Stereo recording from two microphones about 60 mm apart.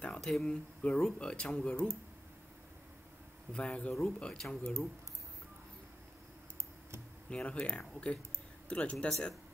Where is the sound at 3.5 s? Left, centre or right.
Centre.